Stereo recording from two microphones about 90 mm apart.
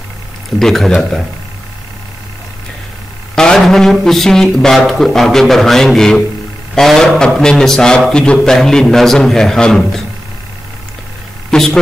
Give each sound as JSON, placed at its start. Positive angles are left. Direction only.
{"t": 0.6, "sound": "speech", "side_deg": 5}
{"t": 3.3, "sound": "speech", "side_deg": 5}
{"t": 11.5, "sound": "a woman's voice", "side_deg": 5}